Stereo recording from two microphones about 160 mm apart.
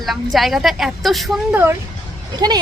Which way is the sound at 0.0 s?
Centre (ahead or behind).